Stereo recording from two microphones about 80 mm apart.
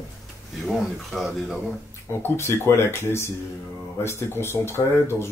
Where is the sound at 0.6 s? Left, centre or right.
Centre.